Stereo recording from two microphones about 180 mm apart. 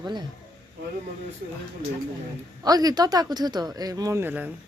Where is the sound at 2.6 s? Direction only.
20° right (ahead or behind).